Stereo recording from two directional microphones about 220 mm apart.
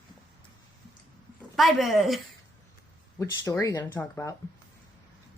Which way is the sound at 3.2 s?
15° left (ahead or behind).